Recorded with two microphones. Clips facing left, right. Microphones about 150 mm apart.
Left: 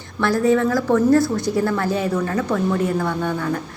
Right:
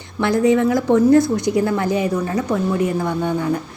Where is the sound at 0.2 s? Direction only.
20° right (ahead or behind).